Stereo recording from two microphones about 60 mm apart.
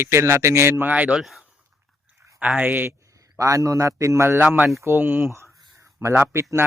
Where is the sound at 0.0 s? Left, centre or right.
Right.